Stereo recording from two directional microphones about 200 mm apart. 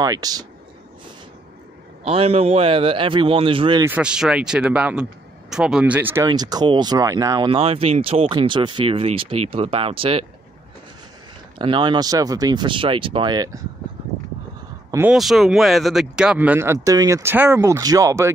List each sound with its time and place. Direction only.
0.0 s speech: 20° right (ahead or behind)
2.0 s speech: 30° right (ahead or behind)
3.8 s speech: 5° right (ahead or behind); by 10.2 s 30° right (ahead or behind)
11.5 s speech: 25° right (ahead or behind)
14.9 s speech: 10° right (ahead or behind)